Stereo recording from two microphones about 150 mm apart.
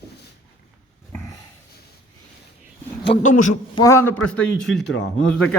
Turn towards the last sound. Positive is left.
turn(degrees=5)  # may be behind; listen again after turning